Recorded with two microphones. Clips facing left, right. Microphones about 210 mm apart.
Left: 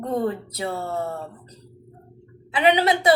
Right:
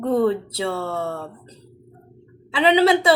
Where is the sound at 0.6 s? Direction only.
90° right.